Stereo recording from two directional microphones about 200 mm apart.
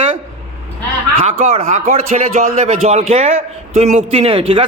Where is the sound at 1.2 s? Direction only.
30° right (ahead or behind).